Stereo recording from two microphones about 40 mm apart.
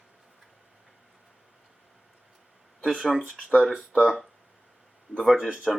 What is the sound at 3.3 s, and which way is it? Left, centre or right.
Speech, centre.